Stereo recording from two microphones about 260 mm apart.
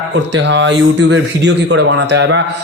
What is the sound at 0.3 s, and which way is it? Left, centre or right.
A man's voice, right.